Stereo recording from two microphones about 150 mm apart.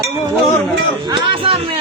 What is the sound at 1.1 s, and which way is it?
Speech, 35° right (ahead or behind).